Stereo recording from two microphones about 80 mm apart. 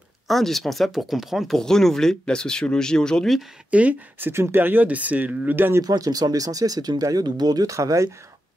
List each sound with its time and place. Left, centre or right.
0.3 s speech: centre
3.7 s speech: centre
4.3 s speech: right
5.8 s speech: right